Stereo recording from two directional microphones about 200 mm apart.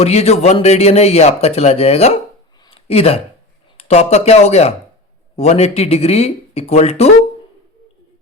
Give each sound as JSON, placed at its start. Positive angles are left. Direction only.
{"t": 0.0, "sound": "speech", "side_deg": 30}
{"t": 2.6, "sound": "a sound", "side_deg": 30}
{"t": 3.8, "sound": "speech", "side_deg": 35}